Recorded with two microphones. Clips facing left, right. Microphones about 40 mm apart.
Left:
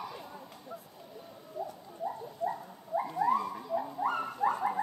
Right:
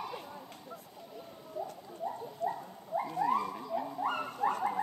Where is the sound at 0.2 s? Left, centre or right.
Centre.